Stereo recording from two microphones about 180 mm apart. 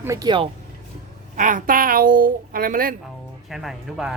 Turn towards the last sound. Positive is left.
turn(degrees=0)  # may be behind; listen again after turning